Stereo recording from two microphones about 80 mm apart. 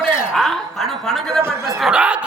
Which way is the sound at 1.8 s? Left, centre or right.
Centre.